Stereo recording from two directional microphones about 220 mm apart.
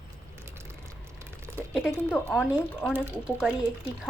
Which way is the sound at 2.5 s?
5° right (ahead or behind).